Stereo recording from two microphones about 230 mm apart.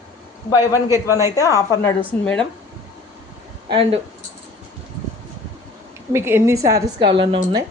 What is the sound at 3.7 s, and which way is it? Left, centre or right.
Speech, right.